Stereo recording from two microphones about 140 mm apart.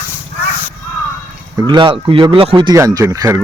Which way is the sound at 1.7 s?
35° right (ahead or behind).